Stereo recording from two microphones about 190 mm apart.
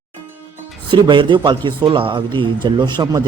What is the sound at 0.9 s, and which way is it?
A man's voice, 25° right (ahead or behind).